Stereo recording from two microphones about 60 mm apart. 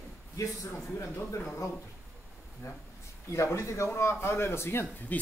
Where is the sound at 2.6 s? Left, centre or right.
Left.